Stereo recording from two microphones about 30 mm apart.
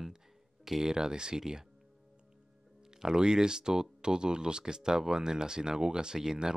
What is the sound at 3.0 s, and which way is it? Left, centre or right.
Speech, right.